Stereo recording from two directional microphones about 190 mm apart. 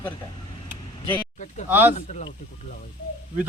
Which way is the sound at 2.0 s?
40° left (ahead or behind).